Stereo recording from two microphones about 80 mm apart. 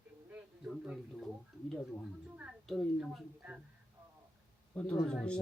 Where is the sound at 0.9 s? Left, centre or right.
Centre.